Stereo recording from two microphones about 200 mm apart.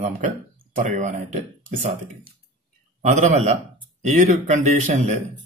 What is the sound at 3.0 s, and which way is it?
Speech, 40° right (ahead or behind).